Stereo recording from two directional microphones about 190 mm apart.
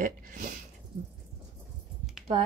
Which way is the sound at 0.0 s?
45° right (ahead or behind).